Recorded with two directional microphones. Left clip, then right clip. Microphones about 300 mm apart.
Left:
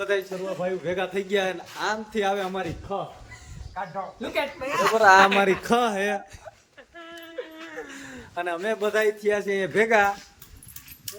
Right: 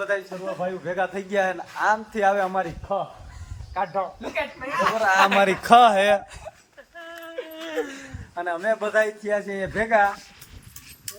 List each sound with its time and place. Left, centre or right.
0.0 s a man's voice: centre
3.8 s speech: right
4.4 s a woman's voice: left
5.4 s a man's voice: centre
6.9 s a sound: centre
7.5 s a sound: right
8.4 s a man's voice: centre